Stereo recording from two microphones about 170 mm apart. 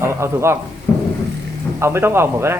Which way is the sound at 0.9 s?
15° left (ahead or behind).